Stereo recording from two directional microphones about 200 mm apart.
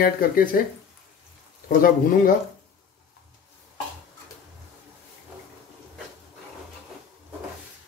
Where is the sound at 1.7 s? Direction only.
45° left (ahead or behind).